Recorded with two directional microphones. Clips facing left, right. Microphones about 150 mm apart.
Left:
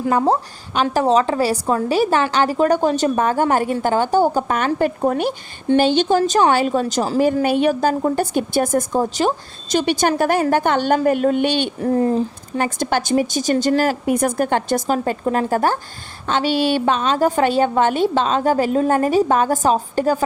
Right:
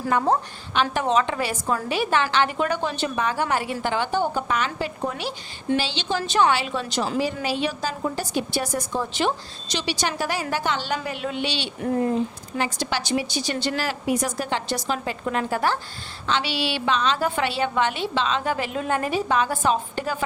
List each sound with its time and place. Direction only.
0.1 s a woman's voice: 35° left (ahead or behind); by 11.7 s 50° left (ahead or behind)
11.8 s a woman's voice: 35° left (ahead or behind)
12.5 s a woman's voice: 50° left (ahead or behind)